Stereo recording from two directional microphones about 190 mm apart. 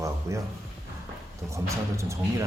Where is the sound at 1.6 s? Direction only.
15° right (ahead or behind).